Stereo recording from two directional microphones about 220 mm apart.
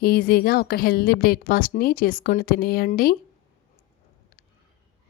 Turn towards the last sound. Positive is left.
turn(degrees=40)  # may be behind; listen again after turning